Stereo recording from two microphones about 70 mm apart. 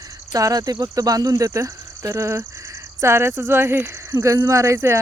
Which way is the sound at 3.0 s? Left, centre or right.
Right.